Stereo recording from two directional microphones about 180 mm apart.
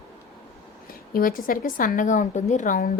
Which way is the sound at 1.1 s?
50° left (ahead or behind).